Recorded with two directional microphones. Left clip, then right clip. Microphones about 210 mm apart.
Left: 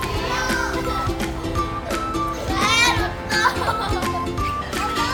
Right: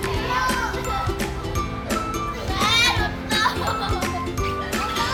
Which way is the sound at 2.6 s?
10° left (ahead or behind).